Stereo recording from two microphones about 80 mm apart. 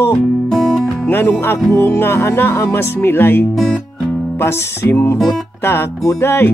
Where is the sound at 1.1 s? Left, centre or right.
Left.